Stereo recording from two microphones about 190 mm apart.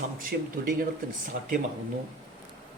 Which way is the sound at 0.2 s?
50° right (ahead or behind).